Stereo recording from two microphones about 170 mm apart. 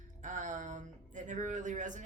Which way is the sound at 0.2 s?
45° right (ahead or behind).